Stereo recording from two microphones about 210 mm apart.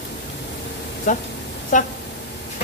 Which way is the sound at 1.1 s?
35° left (ahead or behind).